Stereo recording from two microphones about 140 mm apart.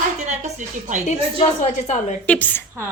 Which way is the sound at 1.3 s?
50° left (ahead or behind).